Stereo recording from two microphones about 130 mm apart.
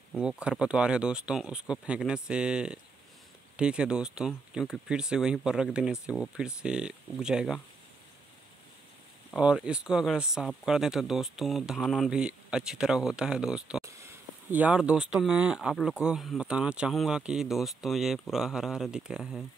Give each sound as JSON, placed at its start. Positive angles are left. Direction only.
{"t": 0.2, "sound": "speech", "side_deg": -5}
{"t": 9.3, "sound": "speech", "side_deg": -5}